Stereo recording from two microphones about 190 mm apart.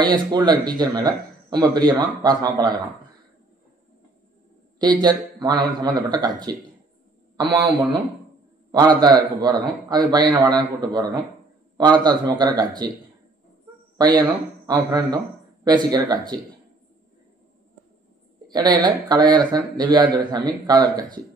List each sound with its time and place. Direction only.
0.0 s a man's voice: 20° right (ahead or behind)
5.0 s a man's voice: 20° right (ahead or behind)
13.9 s a man's voice: 20° right (ahead or behind)
18.5 s a man's voice: 20° right (ahead or behind)